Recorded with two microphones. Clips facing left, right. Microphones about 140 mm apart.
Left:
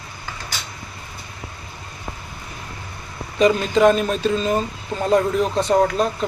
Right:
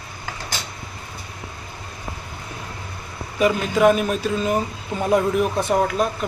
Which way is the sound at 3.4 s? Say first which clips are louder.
Left 2 dB; 5° right (ahead or behind).